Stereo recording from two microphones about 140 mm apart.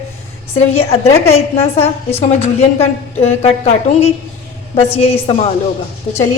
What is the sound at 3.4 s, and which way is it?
A woman's voice, 45° left (ahead or behind).